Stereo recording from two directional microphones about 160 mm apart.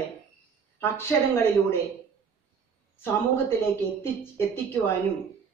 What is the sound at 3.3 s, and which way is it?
Speech, 15° left (ahead or behind).